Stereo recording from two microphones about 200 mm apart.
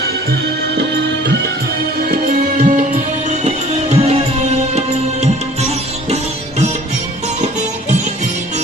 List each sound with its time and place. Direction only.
0.8 s music: 60° right (ahead or behind)
2.0 s music: 45° right (ahead or behind)